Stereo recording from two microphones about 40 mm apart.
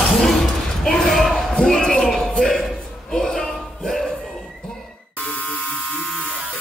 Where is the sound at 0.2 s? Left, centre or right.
Centre.